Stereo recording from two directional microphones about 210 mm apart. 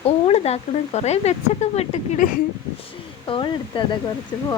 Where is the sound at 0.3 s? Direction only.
30° left (ahead or behind).